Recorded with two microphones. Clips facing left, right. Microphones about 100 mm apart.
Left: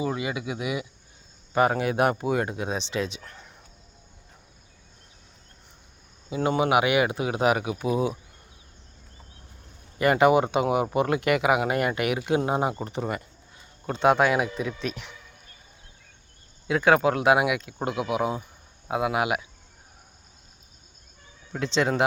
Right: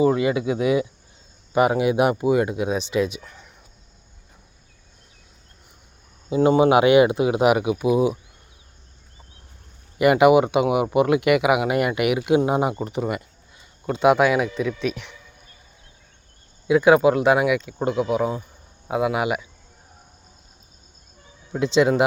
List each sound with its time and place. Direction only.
1.5 s speech: 10° right (ahead or behind)
6.3 s speech: 25° right (ahead or behind); by 8.2 s 5° right (ahead or behind)
10.0 s speech: 10° right (ahead or behind)
16.6 s speech: 5° right (ahead or behind)
21.5 s speech: 10° right (ahead or behind)